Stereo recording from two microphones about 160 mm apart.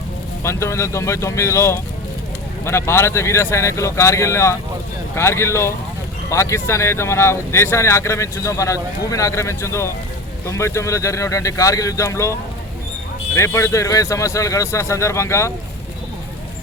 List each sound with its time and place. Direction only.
0.4 s speech: 15° left (ahead or behind)